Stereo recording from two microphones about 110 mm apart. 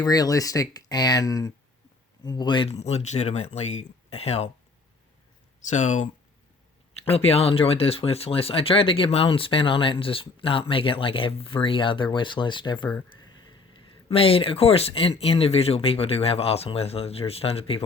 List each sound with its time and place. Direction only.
0.0 s speech: 35° left (ahead or behind)
2.6 s speech: 75° left (ahead or behind)
5.5 s speech: 90° left
7.1 s speech: 65° left (ahead or behind); by 12.9 s 45° left (ahead or behind)
14.1 s speech: 60° left (ahead or behind)